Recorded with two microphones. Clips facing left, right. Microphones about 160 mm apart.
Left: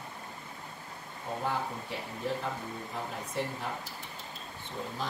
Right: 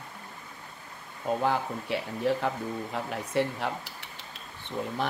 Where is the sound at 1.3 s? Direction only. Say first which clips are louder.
Right 8 dB; 90° right.